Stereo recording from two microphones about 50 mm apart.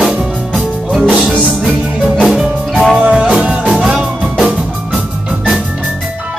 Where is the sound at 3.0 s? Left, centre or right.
Right.